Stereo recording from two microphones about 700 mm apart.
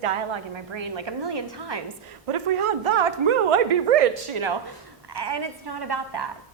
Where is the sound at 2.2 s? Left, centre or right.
Right.